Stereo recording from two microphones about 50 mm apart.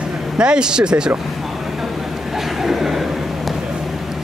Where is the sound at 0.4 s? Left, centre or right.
Centre.